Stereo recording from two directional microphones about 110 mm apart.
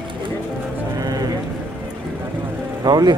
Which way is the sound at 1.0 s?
35° right (ahead or behind).